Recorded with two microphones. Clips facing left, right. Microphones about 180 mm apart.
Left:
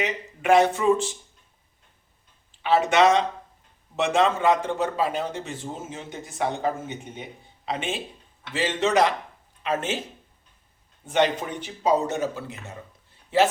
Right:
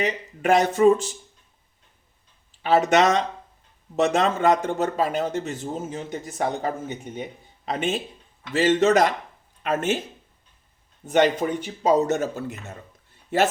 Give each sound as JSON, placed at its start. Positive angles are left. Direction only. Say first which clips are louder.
{"t": 0.0, "sound": "speech", "louder": "right 3 dB", "side_deg": -40}
{"t": 2.6, "sound": "a man's voice", "louder": "right 1 dB", "side_deg": -40}
{"t": 11.0, "sound": "a man's voice", "louder": "right 3 dB", "side_deg": -45}